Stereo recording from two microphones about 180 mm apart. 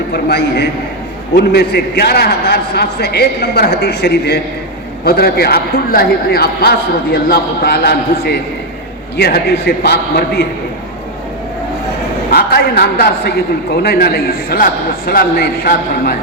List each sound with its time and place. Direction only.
0.1 s a man's voice: 65° left (ahead or behind)
12.3 s a man's voice: 60° left (ahead or behind)